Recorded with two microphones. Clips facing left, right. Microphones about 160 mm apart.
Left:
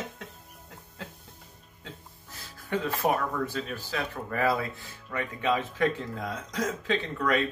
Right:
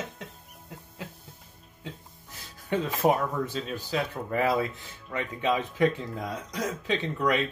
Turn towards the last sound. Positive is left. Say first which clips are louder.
# right 1 dB
turn(degrees=-20)  # may be behind; listen again after turning